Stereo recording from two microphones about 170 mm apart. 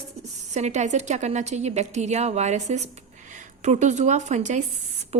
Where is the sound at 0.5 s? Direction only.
40° right (ahead or behind).